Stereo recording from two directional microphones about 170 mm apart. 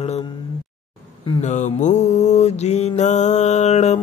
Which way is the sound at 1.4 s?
45° left (ahead or behind).